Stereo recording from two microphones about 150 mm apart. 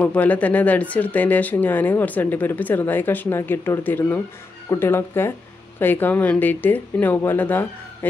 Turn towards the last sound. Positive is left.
turn(degrees=15)  # may be behind; listen again after turning